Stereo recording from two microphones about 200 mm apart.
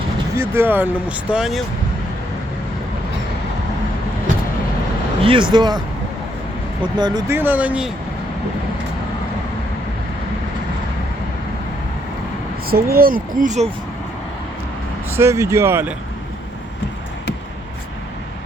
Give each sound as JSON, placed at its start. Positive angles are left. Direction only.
{"t": 0.3, "sound": "speech", "side_deg": -10}
{"t": 5.2, "sound": "speech", "side_deg": -25}
{"t": 7.0, "sound": "speech", "side_deg": -20}
{"t": 12.6, "sound": "speech", "side_deg": -50}
{"t": 15.1, "sound": "speech", "side_deg": -15}